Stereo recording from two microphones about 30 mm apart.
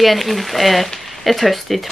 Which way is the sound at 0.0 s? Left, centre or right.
Centre.